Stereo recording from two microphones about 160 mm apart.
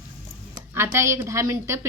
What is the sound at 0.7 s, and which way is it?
A woman's voice, 15° right (ahead or behind).